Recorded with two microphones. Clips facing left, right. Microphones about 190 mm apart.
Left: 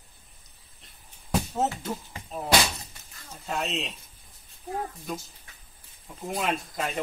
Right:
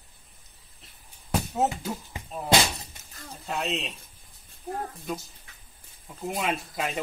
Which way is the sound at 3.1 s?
35° right (ahead or behind).